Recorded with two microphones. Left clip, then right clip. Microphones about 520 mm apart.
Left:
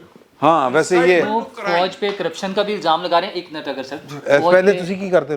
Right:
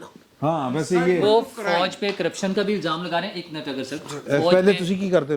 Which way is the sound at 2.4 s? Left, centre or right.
Left.